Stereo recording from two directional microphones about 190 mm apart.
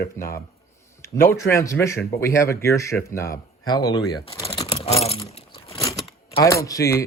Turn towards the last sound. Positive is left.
turn(degrees=15)  # may be behind; listen again after turning